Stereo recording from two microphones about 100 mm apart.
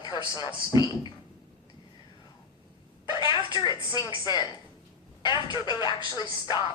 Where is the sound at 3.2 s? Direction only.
50° left (ahead or behind).